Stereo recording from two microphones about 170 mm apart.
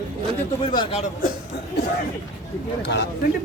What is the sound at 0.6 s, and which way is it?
Speech, 25° left (ahead or behind).